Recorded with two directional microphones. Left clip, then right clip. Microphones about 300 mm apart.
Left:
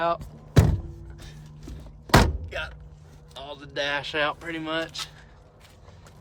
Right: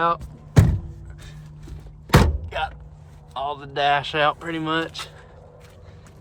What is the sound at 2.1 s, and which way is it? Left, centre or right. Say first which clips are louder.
Thunk: even; centre.